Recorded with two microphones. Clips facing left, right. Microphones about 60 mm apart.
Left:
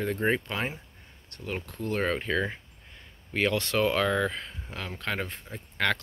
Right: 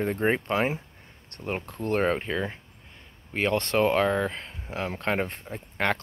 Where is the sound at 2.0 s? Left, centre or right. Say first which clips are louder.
Right 3 dB; right.